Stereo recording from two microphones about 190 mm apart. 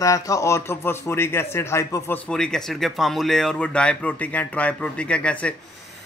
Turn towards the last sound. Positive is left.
turn(degrees=5)  # may be behind; listen again after turning